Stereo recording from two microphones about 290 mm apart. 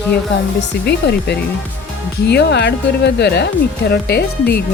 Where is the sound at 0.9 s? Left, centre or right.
Left.